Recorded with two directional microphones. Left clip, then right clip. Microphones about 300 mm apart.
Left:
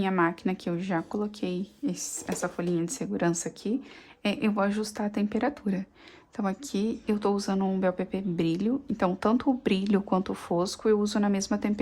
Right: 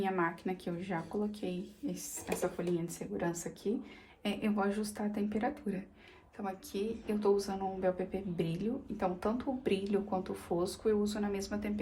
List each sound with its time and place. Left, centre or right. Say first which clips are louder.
0.0 s a woman's voice: left 7 dB; left